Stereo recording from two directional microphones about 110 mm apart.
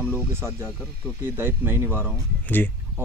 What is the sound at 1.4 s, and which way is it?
Speech, 20° right (ahead or behind).